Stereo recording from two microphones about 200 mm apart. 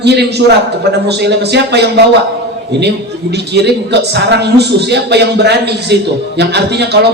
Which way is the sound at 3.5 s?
55° right (ahead or behind).